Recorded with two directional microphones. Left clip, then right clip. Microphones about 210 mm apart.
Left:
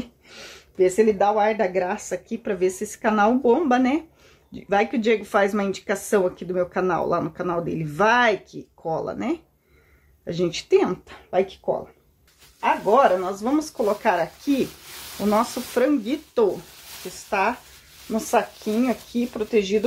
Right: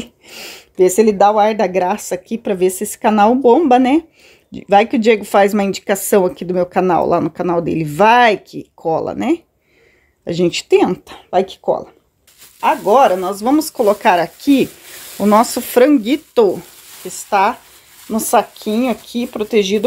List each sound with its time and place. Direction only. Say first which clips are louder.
0.0 s speech: right 7 dB; 45° right (ahead or behind)